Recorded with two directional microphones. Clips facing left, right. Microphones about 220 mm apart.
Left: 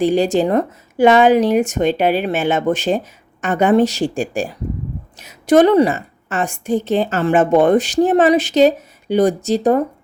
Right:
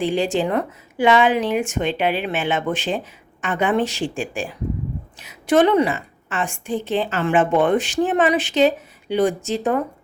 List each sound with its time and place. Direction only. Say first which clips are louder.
0.0 s a woman's voice: left 5 dB; 40° left (ahead or behind)